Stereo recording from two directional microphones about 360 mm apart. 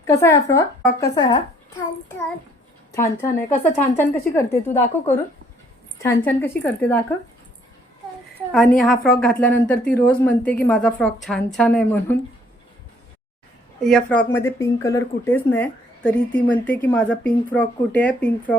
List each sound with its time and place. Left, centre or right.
0.1 s speech: centre
2.9 s speech: centre
8.8 s speech: centre
13.8 s speech: centre